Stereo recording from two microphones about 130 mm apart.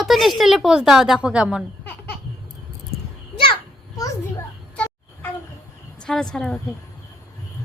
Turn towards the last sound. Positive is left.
turn(degrees=5)  # may be behind; listen again after turning